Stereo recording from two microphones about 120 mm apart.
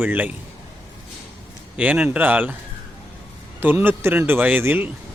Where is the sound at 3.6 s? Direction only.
15° right (ahead or behind).